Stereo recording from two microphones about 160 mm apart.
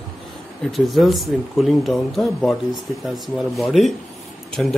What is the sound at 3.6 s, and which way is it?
Speech, centre (ahead or behind).